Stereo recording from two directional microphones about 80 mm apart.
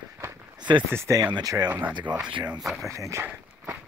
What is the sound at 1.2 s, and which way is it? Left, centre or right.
Speech, right.